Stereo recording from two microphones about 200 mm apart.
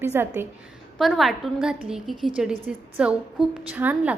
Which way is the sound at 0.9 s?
Centre (ahead or behind).